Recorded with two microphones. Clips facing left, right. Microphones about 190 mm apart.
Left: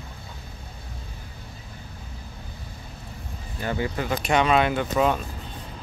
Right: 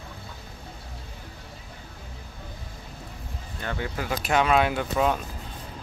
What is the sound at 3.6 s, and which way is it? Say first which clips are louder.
Speech: left 4 dB; 5° left (ahead or behind).